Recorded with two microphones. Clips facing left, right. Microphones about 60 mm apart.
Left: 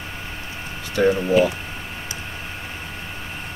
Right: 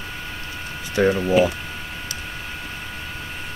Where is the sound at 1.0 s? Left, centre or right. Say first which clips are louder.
Even; centre.